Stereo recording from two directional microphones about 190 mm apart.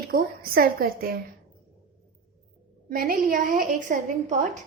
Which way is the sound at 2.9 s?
50° right (ahead or behind).